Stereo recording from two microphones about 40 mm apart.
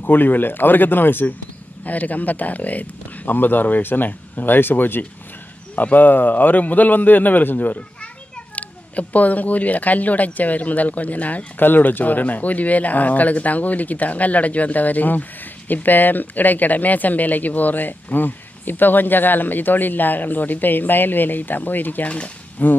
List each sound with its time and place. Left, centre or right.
0.0 s speech: left
1.9 s speech: left
5.8 s speech: left
11.5 s speech: left
22.0 s speech: left
22.6 s speech: left